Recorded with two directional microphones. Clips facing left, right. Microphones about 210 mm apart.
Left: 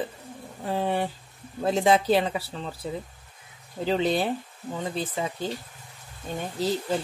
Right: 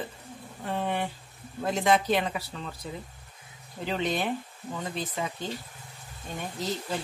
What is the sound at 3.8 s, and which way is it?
Speech, 30° left (ahead or behind).